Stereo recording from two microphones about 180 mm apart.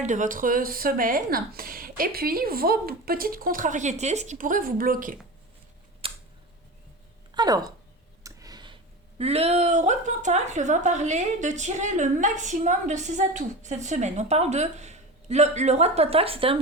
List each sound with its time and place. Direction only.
0.0 s speech: 45° right (ahead or behind)
6.0 s tick: 30° right (ahead or behind)
7.3 s speech: 20° right (ahead or behind)